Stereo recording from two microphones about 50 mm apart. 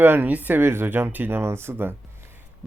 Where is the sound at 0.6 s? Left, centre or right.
Right.